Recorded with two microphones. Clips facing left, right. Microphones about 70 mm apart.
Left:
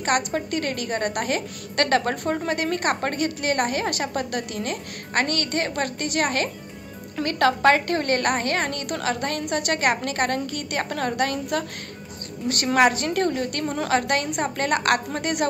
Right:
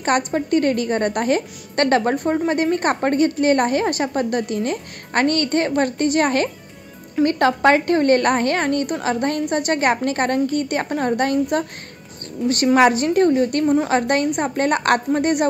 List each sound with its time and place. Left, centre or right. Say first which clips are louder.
0.0 s a woman's voice: right 4 dB; right
12.7 s a woman's voice: right 4 dB; right